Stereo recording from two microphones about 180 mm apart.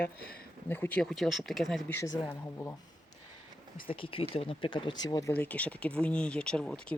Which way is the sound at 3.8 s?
30° left (ahead or behind).